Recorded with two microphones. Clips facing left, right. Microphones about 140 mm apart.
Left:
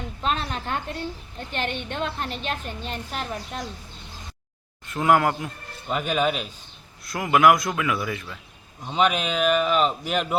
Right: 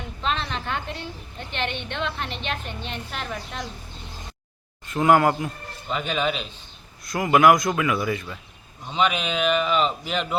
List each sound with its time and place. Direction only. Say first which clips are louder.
0.2 s a woman's voice: even; 45° left (ahead or behind)
4.9 s a man's voice: right 2 dB; centre (ahead or behind)